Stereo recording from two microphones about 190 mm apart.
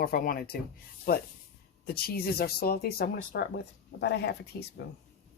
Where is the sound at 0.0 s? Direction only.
50° left (ahead or behind).